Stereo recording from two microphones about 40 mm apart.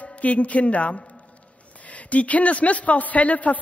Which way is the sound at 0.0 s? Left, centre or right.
Left.